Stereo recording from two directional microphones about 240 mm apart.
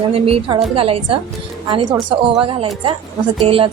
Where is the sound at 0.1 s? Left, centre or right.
Right.